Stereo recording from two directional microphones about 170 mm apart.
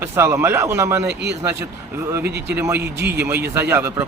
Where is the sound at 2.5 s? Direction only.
10° right (ahead or behind).